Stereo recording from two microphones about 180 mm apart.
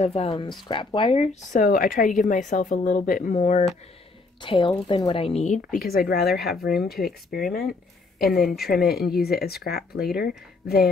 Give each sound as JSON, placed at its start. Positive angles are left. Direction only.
{"t": 0.0, "sound": "speech", "side_deg": 35}
{"t": 1.6, "sound": "a woman's voice", "side_deg": 50}
{"t": 4.4, "sound": "speech", "side_deg": 25}
{"t": 6.4, "sound": "speech", "side_deg": 0}
{"t": 7.0, "sound": "speech", "side_deg": 55}
{"t": 8.5, "sound": "speech", "side_deg": 0}
{"t": 9.2, "sound": "speech", "side_deg": 60}